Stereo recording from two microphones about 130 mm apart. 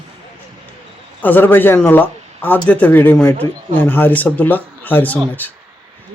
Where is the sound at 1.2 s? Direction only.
15° left (ahead or behind).